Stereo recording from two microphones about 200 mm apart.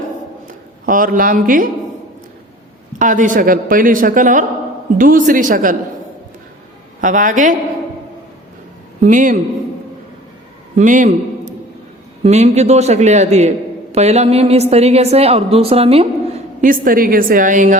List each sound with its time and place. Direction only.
0.4 s speech: 40° right (ahead or behind)
3.0 s a woman's voice: 40° right (ahead or behind)
7.0 s a woman's voice: 40° right (ahead or behind)
9.0 s a woman's voice: 40° right (ahead or behind)
10.8 s a man's voice: 40° right (ahead or behind)